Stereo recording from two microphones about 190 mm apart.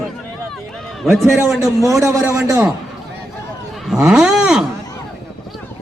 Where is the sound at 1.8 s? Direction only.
15° right (ahead or behind).